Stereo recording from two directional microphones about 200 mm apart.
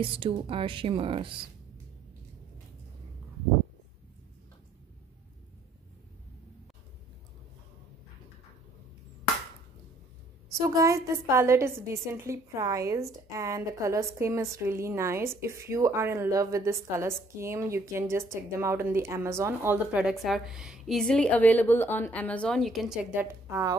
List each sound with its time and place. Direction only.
0.0 s speech: 25° right (ahead or behind)
10.7 s a woman's voice: 15° right (ahead or behind)